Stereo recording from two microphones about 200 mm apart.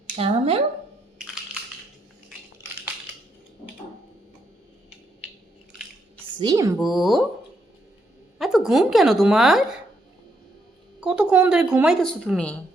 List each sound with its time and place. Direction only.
0.2 s speech: 30° right (ahead or behind)
6.4 s a woman's voice: 15° right (ahead or behind)
6.7 s a woman's voice: centre (ahead or behind)
8.4 s a woman's voice: centre (ahead or behind)
11.0 s a woman's voice: 5° right (ahead or behind)